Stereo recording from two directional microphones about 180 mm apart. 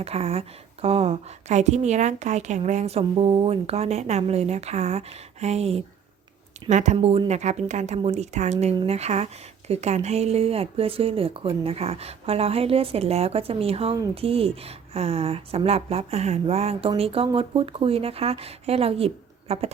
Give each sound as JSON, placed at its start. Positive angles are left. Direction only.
{"t": 0.0, "sound": "a woman's voice", "side_deg": -35}